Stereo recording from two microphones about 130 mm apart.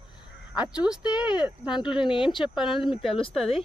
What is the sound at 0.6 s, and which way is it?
Speech, 5° right (ahead or behind).